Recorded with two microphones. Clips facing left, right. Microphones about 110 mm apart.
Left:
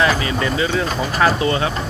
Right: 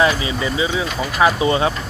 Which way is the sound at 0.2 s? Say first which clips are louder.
Left 1 dB; 15° right (ahead or behind).